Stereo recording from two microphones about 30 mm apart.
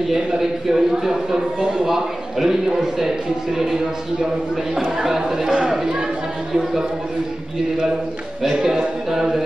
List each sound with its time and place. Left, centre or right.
0.1 s a man's voice: centre
4.7 s a man's voice: centre
8.5 s speech: right